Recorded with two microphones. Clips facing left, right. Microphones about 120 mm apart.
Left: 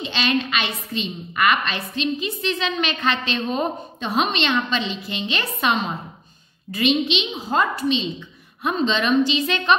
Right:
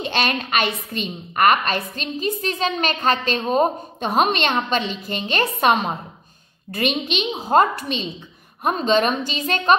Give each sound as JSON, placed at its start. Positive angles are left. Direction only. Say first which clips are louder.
{"t": 0.0, "sound": "a woman's voice", "louder": "even", "side_deg": -50}